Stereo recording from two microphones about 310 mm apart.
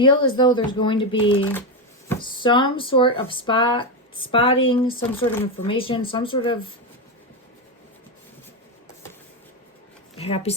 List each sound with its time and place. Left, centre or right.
0.0 s speech: centre
10.2 s speech: centre